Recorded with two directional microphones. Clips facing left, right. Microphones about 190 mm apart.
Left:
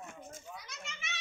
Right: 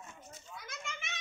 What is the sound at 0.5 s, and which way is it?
Children playing, 50° right (ahead or behind).